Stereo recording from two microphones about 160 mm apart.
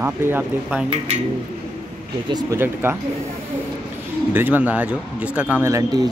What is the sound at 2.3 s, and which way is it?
Speech, 25° right (ahead or behind).